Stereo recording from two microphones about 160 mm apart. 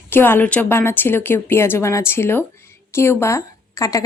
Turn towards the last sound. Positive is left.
turn(degrees=20)  # may be behind; listen again after turning